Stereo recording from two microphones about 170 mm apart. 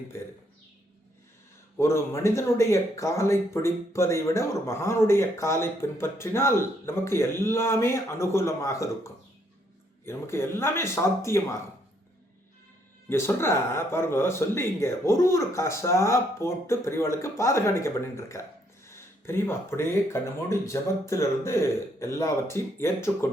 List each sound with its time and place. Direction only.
1.8 s speech: 15° left (ahead or behind)
13.1 s speech: 15° left (ahead or behind)